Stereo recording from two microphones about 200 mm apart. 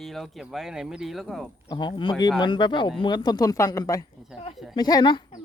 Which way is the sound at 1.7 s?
20° left (ahead or behind).